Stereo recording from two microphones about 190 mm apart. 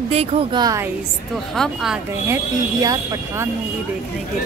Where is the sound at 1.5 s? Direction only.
5° right (ahead or behind).